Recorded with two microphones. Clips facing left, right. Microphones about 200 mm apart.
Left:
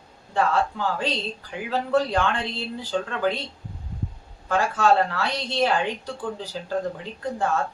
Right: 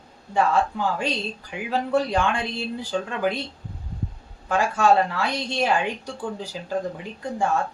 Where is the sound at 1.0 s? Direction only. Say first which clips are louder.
Even; 15° right (ahead or behind).